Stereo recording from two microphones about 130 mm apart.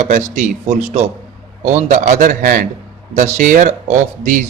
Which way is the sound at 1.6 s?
80° right.